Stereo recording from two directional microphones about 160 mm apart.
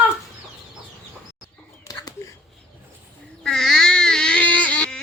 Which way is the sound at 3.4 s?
5° left (ahead or behind).